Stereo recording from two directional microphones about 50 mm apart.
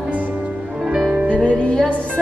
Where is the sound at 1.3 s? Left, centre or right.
Left.